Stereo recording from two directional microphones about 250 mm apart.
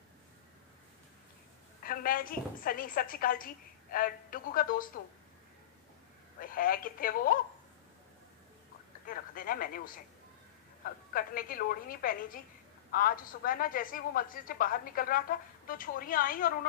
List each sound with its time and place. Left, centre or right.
1.8 s a woman's voice: left
6.4 s a woman's voice: left
9.0 s a woman's voice: left